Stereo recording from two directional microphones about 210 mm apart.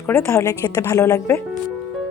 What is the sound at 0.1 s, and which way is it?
Speech, 15° left (ahead or behind).